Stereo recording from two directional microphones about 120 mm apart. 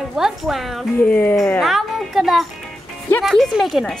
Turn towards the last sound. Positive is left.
turn(degrees=0)  # may be behind; listen again after turning